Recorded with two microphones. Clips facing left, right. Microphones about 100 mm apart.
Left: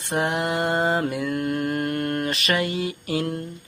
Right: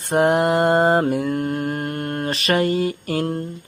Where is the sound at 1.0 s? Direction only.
40° right (ahead or behind).